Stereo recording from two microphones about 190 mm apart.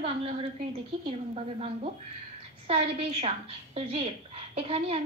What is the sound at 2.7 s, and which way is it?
A woman's voice, 30° right (ahead or behind).